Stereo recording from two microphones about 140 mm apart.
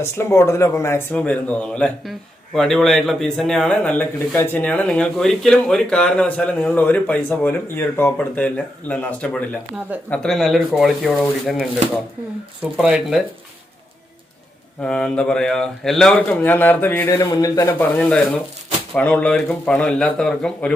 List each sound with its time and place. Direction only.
0.0 s speech: 20° left (ahead or behind); by 11.6 s centre (ahead or behind)
12.7 s speech: 5° right (ahead or behind)
14.8 s speech: 5° left (ahead or behind)
17.2 s speech: 25° left (ahead or behind); by 20.7 s 5° left (ahead or behind)